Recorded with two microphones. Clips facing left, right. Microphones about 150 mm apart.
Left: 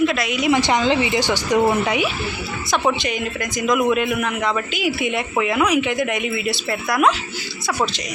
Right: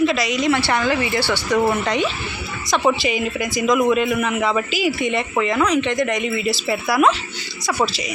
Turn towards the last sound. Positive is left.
turn(degrees=0)  # may be behind; listen again after turning